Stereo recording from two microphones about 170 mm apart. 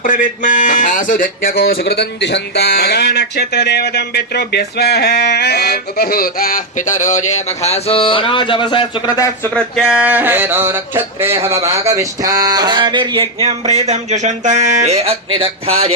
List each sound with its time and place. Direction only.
0.0 s speech: 50° left (ahead or behind); by 9.5 s 20° left (ahead or behind)
9.6 s speech: centre (ahead or behind); by 15.9 s 35° right (ahead or behind)